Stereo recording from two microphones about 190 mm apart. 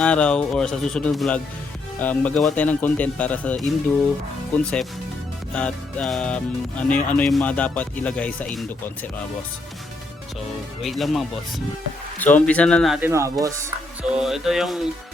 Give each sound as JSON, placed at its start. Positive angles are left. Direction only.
{"t": 0.0, "sound": "speech", "side_deg": 5}
{"t": 10.8, "sound": "speech", "side_deg": 0}
{"t": 13.0, "sound": "speech", "side_deg": -15}
{"t": 14.1, "sound": "speech", "side_deg": -5}